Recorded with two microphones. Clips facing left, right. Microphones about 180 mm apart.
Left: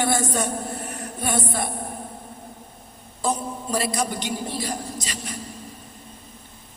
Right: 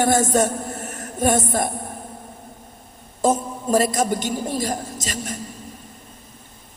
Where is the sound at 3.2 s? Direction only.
45° right (ahead or behind).